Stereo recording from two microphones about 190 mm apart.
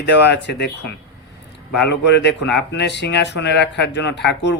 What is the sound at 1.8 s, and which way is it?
Speech, 65° left (ahead or behind).